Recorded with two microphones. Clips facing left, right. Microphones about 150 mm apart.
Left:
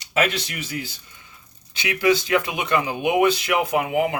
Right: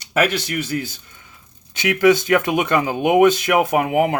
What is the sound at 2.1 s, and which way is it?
Speech, 50° right (ahead or behind).